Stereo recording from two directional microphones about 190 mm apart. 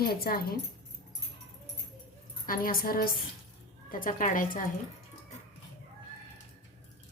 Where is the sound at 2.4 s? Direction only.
50° left (ahead or behind).